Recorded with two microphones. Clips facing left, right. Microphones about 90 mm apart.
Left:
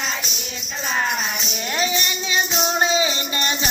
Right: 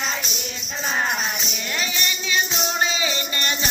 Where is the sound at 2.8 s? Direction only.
25° left (ahead or behind).